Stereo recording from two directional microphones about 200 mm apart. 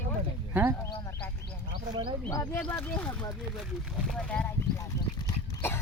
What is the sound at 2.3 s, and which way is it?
Speech, 15° left (ahead or behind).